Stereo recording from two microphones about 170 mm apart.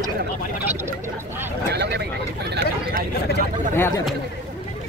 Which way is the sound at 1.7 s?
75° right (ahead or behind).